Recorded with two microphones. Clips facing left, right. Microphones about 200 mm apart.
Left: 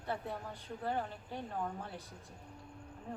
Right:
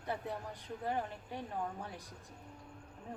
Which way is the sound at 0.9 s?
15° right (ahead or behind).